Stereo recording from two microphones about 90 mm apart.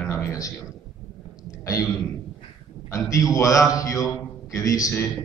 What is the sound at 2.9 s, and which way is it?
A man's voice, 35° left (ahead or behind).